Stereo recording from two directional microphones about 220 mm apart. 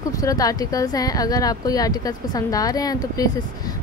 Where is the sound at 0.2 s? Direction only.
15° left (ahead or behind).